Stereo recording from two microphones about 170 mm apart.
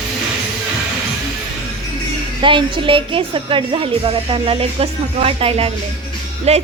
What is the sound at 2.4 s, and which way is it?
Speech, 30° right (ahead or behind).